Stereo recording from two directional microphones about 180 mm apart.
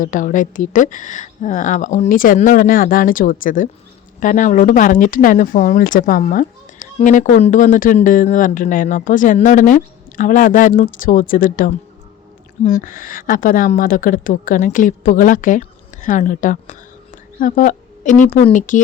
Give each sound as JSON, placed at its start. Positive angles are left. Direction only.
{"t": 0.0, "sound": "speech", "side_deg": 45}